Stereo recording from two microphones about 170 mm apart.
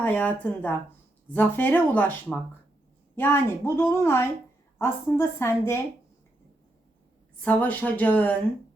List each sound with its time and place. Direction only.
0.0 s speech: 10° left (ahead or behind)
7.4 s speech: 10° left (ahead or behind)